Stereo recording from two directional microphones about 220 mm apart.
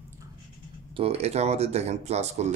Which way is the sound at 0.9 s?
30° right (ahead or behind).